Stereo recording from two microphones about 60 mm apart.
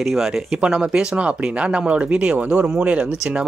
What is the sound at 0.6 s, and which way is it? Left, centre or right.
Speech, centre.